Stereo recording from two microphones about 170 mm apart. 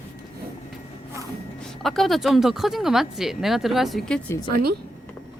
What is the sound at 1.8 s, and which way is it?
Speech, centre (ahead or behind).